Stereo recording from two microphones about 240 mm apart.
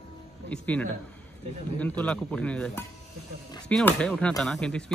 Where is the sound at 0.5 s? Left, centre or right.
Centre.